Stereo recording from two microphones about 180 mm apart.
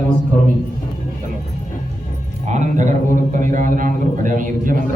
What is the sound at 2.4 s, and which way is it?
A man's voice, 40° right (ahead or behind).